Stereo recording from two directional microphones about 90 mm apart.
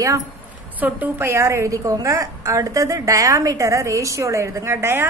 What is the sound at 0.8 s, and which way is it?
A woman's voice, 20° right (ahead or behind).